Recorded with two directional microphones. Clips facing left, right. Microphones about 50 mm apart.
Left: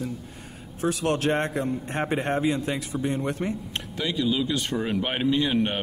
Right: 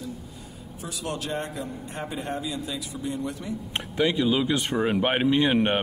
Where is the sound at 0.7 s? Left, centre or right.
Left.